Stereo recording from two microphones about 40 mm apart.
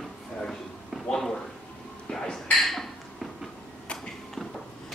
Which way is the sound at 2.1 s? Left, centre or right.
Left.